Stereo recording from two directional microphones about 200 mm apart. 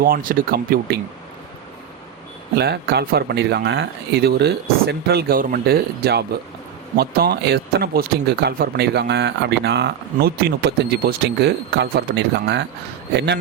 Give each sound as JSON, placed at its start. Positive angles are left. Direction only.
{"t": 0.0, "sound": "speech", "side_deg": -45}
{"t": 2.6, "sound": "speech", "side_deg": -55}